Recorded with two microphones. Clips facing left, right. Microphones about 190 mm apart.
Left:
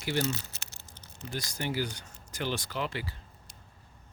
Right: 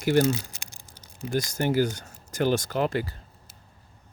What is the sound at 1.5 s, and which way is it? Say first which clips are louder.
Speech: right 8 dB; 45° right (ahead or behind).